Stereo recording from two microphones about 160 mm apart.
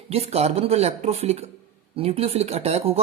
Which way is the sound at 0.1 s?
40° right (ahead or behind).